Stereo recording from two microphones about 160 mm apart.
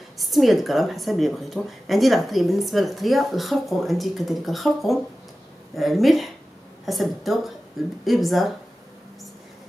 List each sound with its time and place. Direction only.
0.2 s speech: centre (ahead or behind)